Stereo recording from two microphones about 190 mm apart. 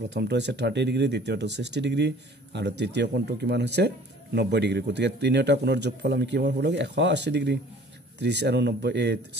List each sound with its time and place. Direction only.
0.1 s speech: 65° right (ahead or behind)